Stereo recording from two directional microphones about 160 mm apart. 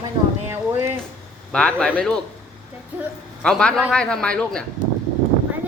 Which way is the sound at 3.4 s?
5° left (ahead or behind).